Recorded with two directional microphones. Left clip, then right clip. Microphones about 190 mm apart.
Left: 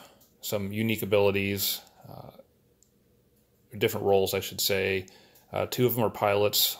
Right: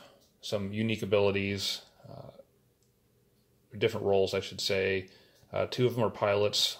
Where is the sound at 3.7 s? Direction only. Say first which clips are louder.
Left 3 dB; 20° left (ahead or behind).